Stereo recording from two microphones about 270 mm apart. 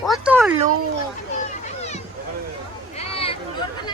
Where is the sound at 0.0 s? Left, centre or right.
Centre.